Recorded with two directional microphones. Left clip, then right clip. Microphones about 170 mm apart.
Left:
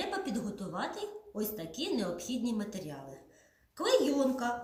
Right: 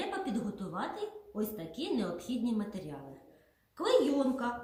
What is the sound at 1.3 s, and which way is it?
A woman's voice, 10° left (ahead or behind).